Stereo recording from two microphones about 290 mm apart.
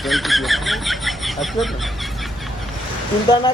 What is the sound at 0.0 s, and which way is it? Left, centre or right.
Speech, centre.